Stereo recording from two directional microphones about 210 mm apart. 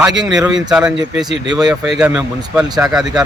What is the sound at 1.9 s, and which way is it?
A man's voice, 5° right (ahead or behind).